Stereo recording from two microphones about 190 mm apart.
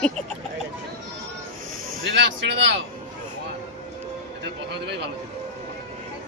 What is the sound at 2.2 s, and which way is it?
Speech, 70° right (ahead or behind).